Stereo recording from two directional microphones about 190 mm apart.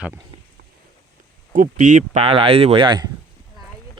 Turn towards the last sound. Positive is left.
turn(degrees=-20)  # may be behind; listen again after turning